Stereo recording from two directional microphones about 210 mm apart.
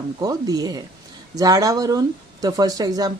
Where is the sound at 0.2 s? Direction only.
15° right (ahead or behind).